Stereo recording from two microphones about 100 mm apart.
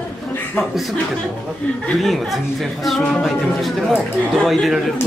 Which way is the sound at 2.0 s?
Centre (ahead or behind).